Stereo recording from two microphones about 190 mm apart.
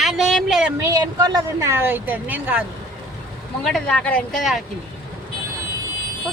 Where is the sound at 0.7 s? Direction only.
15° right (ahead or behind).